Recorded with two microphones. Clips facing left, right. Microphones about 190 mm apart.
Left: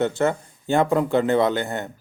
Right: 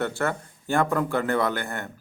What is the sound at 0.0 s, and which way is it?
Speech, 20° left (ahead or behind).